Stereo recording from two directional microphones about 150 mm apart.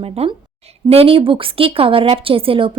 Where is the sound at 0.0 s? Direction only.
40° right (ahead or behind).